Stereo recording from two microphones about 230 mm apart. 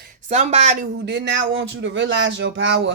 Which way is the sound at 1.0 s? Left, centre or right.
Right.